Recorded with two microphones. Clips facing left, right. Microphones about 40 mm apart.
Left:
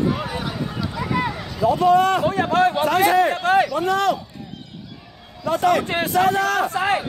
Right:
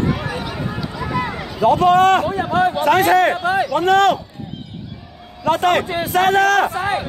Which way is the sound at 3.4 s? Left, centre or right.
Left.